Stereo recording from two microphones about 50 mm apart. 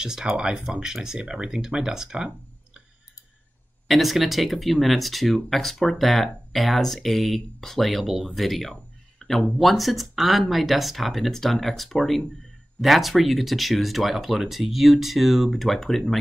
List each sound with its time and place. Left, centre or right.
0.0 s speech: centre
3.8 s speech: centre
9.2 s a sound: centre
9.6 s speech: centre